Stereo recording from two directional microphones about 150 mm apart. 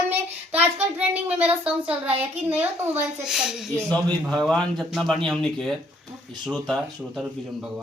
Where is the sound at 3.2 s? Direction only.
5° right (ahead or behind).